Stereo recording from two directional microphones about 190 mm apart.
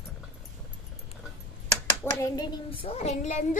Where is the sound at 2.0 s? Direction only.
10° left (ahead or behind).